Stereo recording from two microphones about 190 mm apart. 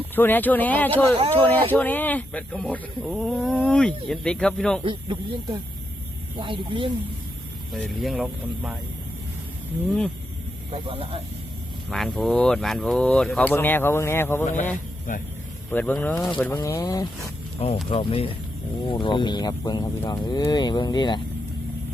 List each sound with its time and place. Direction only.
0.2 s speech: 10° left (ahead or behind)
4.8 s speech: 25° right (ahead or behind)
6.4 s speech: 25° right (ahead or behind)
7.7 s speech: centre (ahead or behind)
10.7 s speech: 30° right (ahead or behind)
11.9 s speech: centre (ahead or behind)
14.4 s speech: 40° left (ahead or behind)
15.7 s speech: 10° left (ahead or behind)
17.8 s speech: 30° left (ahead or behind)